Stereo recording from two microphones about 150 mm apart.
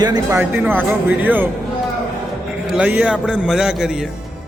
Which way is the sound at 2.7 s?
10° right (ahead or behind).